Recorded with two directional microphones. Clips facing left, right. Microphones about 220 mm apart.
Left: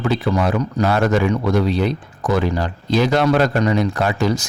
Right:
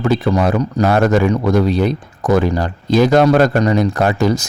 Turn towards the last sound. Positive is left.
turn(degrees=-45)  # may be behind; listen again after turning